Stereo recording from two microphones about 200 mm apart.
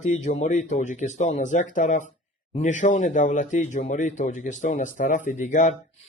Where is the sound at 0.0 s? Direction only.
35° left (ahead or behind).